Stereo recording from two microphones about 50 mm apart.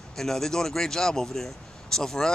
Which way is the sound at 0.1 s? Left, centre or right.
Centre.